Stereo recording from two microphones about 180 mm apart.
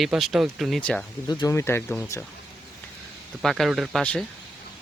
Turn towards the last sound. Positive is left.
turn(degrees=5)  # may be behind; listen again after turning